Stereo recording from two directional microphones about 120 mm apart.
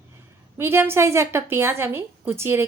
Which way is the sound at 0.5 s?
20° right (ahead or behind).